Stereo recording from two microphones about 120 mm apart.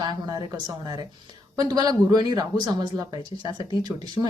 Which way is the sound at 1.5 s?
35° right (ahead or behind).